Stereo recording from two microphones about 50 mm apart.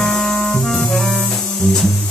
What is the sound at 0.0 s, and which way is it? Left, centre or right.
Music, centre.